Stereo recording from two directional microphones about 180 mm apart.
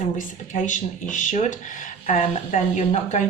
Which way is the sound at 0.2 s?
45° left (ahead or behind).